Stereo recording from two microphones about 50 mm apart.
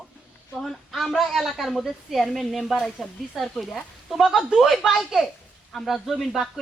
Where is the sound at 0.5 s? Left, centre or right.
Centre.